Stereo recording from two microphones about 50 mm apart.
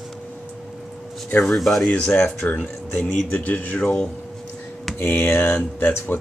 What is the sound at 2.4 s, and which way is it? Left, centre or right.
Speech, left.